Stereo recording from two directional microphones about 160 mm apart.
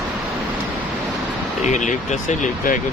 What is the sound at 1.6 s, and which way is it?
Speech, 45° left (ahead or behind).